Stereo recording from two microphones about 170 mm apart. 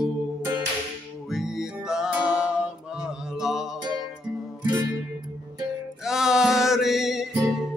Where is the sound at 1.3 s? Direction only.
5° right (ahead or behind).